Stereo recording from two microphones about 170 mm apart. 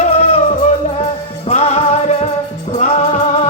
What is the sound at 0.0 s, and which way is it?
Music, 35° left (ahead or behind).